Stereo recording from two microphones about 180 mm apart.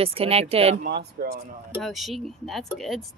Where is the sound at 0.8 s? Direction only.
60° right (ahead or behind).